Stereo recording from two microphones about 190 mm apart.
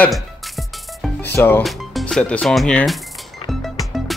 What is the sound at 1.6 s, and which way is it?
Speech, centre (ahead or behind).